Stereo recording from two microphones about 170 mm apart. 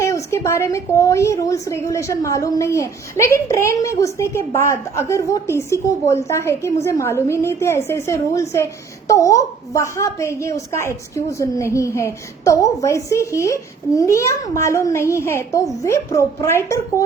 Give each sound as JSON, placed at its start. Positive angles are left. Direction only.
{"t": 0.0, "sound": "a woman's voice", "side_deg": 15}